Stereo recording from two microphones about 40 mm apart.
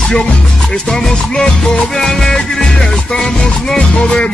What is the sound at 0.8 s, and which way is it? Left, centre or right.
Music, centre.